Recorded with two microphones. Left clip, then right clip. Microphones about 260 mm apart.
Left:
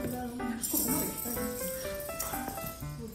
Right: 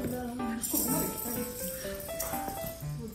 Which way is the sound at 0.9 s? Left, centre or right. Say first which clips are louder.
Right 1 dB; left.